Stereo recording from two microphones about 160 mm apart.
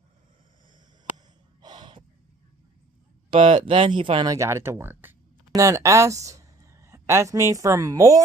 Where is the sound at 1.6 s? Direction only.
30° right (ahead or behind).